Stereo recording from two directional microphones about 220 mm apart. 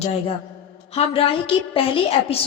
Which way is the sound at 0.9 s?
25° left (ahead or behind).